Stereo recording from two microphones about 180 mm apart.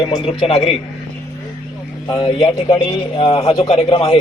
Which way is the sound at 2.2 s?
25° left (ahead or behind).